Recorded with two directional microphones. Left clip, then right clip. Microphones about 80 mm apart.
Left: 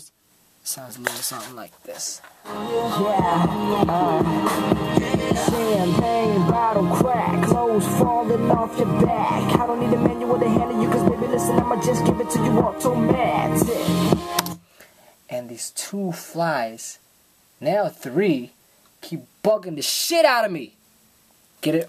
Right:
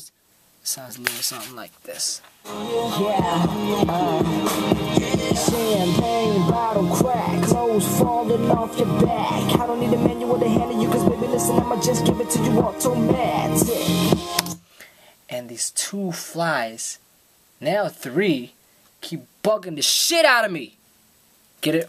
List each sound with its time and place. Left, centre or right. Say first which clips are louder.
0.7 s a woman's voice: right 1 dB; centre
2.4 s music: even; right
7.2 s music: left 2 dB; right
7.5 s music: right 1 dB; right
11.3 s a woman's voice: even; centre
12.9 s music: left 1 dB; right
14.8 s a woman's voice: right 3 dB; centre